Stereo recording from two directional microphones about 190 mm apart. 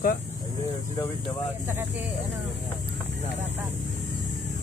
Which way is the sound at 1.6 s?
10° right (ahead or behind).